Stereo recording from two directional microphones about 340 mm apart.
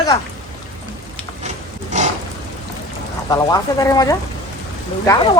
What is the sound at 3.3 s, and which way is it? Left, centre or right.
Speech, centre.